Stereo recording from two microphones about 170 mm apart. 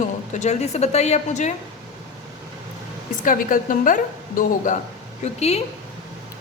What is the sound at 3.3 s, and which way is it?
A woman's voice, 55° left (ahead or behind).